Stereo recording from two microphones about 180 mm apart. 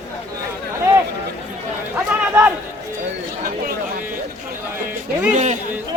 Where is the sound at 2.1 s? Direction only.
10° right (ahead or behind).